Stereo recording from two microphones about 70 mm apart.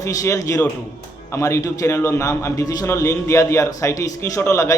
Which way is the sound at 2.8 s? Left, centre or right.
Left.